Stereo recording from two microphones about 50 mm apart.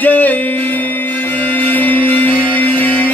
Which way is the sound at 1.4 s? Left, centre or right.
Left.